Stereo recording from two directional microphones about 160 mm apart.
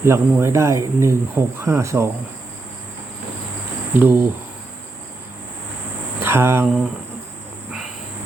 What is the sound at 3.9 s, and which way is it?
Speech, 10° right (ahead or behind).